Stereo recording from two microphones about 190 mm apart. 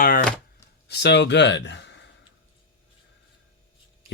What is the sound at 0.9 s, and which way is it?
Speech, 60° left (ahead or behind).